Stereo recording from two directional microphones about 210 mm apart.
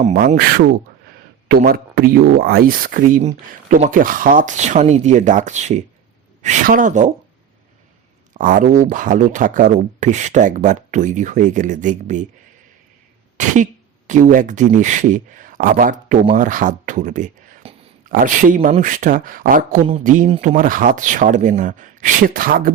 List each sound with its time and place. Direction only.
0.0 s speech: 40° right (ahead or behind)
8.3 s speech: 40° right (ahead or behind)
13.4 s speech: 35° right (ahead or behind)